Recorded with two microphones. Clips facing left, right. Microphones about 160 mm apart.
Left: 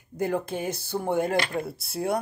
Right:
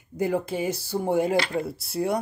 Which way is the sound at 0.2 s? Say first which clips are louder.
Right 2 dB; 10° right (ahead or behind).